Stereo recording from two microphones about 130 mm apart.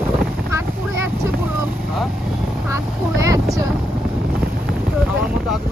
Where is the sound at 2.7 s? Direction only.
25° right (ahead or behind).